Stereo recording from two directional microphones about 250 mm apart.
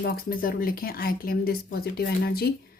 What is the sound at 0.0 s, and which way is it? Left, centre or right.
Speech, left.